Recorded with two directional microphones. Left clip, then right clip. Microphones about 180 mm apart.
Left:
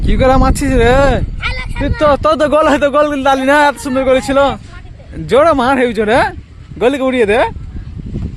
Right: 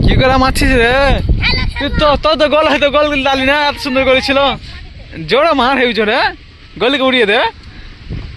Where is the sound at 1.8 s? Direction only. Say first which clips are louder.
Left 1 dB; 40° left (ahead or behind); by 7.5 s 10° left (ahead or behind).